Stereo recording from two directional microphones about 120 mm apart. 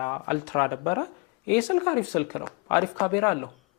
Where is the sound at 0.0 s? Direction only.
20° left (ahead or behind).